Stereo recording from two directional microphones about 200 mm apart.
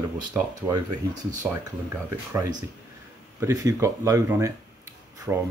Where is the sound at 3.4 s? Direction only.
15° right (ahead or behind).